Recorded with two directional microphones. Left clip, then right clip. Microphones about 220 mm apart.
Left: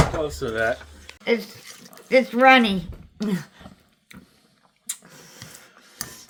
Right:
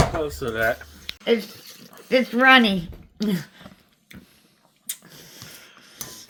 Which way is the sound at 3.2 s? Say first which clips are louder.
Right 1 dB; 15° right (ahead or behind).